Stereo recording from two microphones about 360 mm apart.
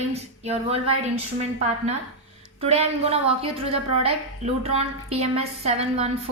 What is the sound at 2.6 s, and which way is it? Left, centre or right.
A woman's voice, centre.